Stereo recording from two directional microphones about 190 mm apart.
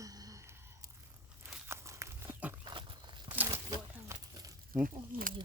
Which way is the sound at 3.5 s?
20° right (ahead or behind).